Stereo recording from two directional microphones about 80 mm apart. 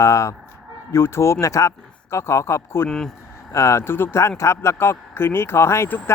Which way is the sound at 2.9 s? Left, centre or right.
Centre.